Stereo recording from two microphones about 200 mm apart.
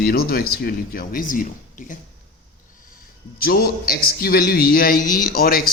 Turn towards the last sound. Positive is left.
turn(degrees=45)  # may be behind; listen again after turning